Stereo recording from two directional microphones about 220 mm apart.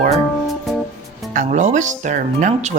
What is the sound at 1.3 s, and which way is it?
Speech, 35° right (ahead or behind).